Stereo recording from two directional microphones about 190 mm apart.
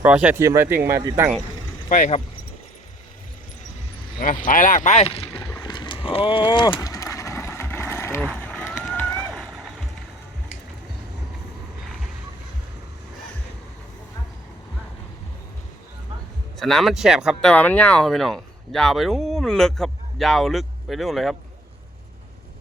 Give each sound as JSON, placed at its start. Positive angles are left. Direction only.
{"t": 0.0, "sound": "speech", "side_deg": -5}
{"t": 1.9, "sound": "speech", "side_deg": 40}
{"t": 4.2, "sound": "speech", "side_deg": 45}
{"t": 5.5, "sound": "a sound", "side_deg": 20}
{"t": 8.4, "sound": "vehicle", "side_deg": 5}
{"t": 16.6, "sound": "speech", "side_deg": 0}
{"t": 17.5, "sound": "speech", "side_deg": 10}